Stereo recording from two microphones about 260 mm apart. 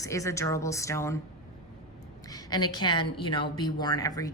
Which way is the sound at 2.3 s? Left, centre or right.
Centre.